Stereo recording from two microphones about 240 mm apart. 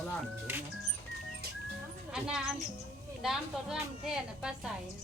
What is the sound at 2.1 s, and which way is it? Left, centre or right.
A woman's voice, centre.